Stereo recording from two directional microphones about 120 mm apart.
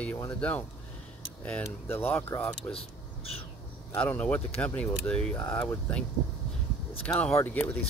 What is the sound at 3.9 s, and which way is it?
Speech, 15° left (ahead or behind).